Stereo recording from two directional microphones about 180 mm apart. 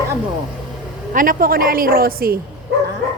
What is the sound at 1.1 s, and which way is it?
Speech, 50° right (ahead or behind).